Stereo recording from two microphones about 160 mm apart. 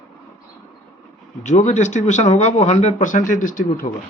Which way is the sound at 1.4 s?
45° left (ahead or behind).